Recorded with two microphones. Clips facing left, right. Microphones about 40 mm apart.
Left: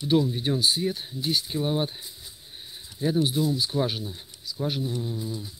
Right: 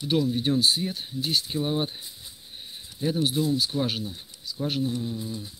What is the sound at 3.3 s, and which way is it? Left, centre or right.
Speech, right.